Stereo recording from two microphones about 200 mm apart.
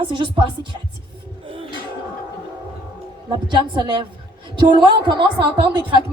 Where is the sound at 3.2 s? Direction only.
25° right (ahead or behind).